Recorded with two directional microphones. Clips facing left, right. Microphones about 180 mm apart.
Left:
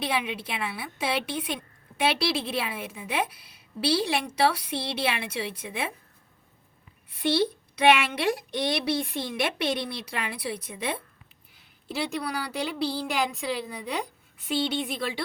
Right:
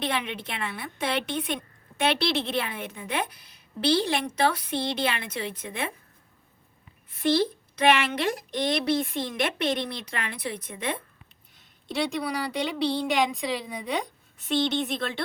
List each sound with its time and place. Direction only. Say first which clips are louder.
0.0 s a woman's voice: even; 10° left (ahead or behind)
8.2 s a woman's voice: even; 5° left (ahead or behind)